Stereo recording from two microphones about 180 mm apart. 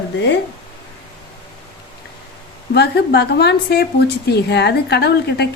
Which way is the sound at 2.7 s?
65° left (ahead or behind).